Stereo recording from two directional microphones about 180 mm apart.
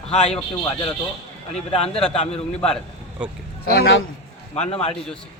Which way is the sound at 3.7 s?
75° left (ahead or behind).